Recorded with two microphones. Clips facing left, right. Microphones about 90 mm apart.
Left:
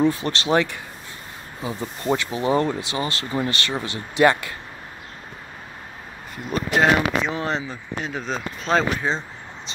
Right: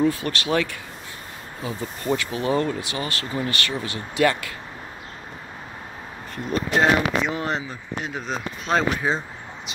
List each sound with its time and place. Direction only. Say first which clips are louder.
0.0 s speech: left 1 dB; 25° left (ahead or behind)
6.3 s speech: even; 5° left (ahead or behind)
7.3 s speech: left 1 dB; 30° left (ahead or behind)
8.0 s speech: left 1 dB; 10° right (ahead or behind)